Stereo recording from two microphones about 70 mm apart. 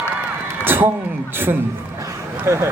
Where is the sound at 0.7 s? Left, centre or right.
Right.